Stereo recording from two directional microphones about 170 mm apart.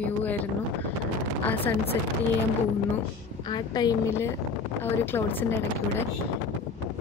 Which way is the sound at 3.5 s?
25° left (ahead or behind).